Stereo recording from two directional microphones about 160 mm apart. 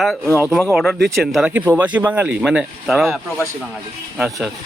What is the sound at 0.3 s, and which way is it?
A man's voice, 10° right (ahead or behind).